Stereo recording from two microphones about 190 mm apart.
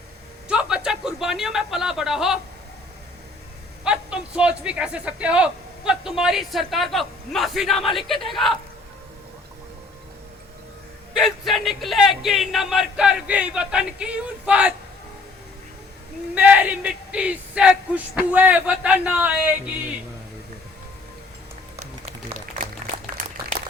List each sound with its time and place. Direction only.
0.4 s speech: 5° right (ahead or behind)
3.8 s a man's voice: 5° right (ahead or behind)
11.1 s a man's voice: centre (ahead or behind)
16.3 s speech: 10° right (ahead or behind)